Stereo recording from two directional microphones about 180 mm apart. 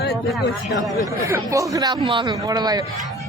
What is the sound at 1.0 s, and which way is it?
Speech, 20° right (ahead or behind).